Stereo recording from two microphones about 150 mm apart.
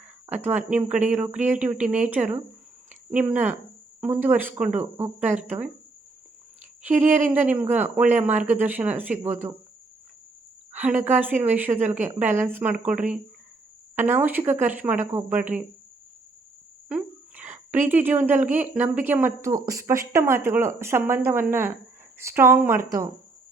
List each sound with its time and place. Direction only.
0.3 s speech: 10° right (ahead or behind)
7.1 s speech: 10° right (ahead or behind)
10.7 s a sound: 10° right (ahead or behind)
11.1 s speech: 10° right (ahead or behind)
16.9 s a sound: 10° right (ahead or behind)
17.8 s speech: 10° right (ahead or behind)